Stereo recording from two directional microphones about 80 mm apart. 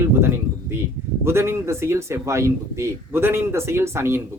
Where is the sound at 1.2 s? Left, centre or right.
Right.